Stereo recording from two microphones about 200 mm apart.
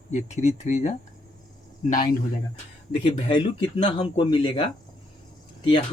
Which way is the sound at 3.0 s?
25° left (ahead or behind).